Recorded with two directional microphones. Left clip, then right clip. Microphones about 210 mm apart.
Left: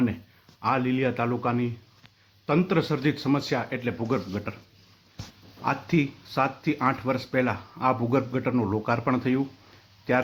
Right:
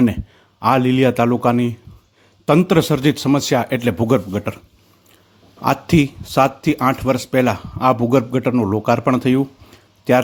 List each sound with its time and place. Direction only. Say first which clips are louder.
0.6 s speech: right 10 dB; 50° right (ahead or behind)
5.6 s speech: right 9 dB; 45° right (ahead or behind)